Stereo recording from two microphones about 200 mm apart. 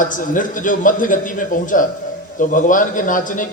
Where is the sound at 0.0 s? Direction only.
40° left (ahead or behind).